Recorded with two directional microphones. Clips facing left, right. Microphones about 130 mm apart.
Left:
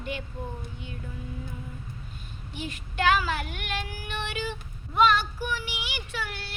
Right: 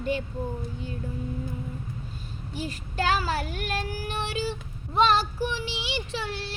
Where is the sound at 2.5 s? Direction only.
40° right (ahead or behind).